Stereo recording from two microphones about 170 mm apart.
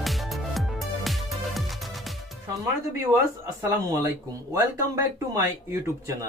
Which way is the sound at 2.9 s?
20° right (ahead or behind).